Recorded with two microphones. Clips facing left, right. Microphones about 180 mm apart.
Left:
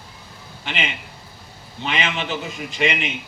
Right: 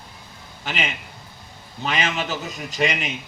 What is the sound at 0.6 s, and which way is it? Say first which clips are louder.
A man's voice: even; 40° right (ahead or behind).